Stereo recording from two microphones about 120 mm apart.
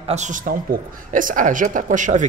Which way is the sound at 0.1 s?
85° right.